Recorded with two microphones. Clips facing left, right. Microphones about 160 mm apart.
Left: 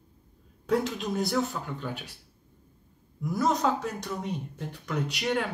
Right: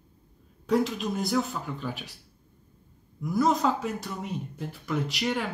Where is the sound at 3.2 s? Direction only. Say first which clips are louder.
Right 2 dB; centre (ahead or behind).